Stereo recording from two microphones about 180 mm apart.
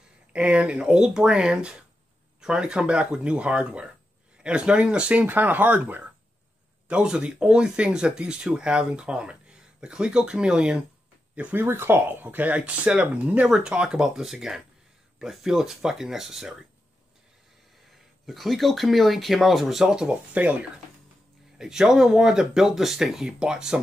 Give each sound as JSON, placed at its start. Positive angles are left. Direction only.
{"t": 0.3, "sound": "speech", "side_deg": -5}
{"t": 18.2, "sound": "speech", "side_deg": 0}